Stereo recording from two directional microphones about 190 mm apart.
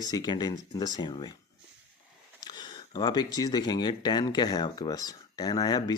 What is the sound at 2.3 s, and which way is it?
Speech, 20° left (ahead or behind).